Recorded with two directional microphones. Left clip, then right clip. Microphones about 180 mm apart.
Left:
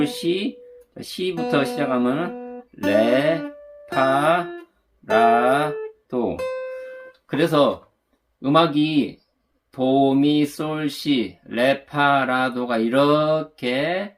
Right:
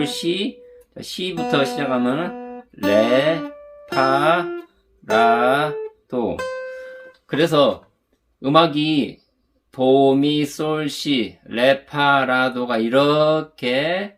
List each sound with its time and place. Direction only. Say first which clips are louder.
0.0 s speech: right 1 dB; 15° right (ahead or behind)